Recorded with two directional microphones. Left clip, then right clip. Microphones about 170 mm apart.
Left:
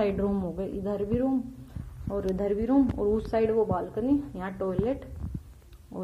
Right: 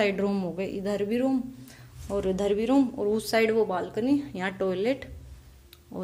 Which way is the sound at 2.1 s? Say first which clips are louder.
Right 2 dB; 20° right (ahead or behind).